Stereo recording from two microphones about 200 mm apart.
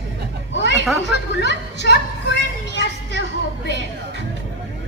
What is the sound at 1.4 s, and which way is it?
A woman's voice, 60° left (ahead or behind).